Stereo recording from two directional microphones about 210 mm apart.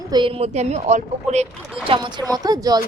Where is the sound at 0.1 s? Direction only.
25° right (ahead or behind).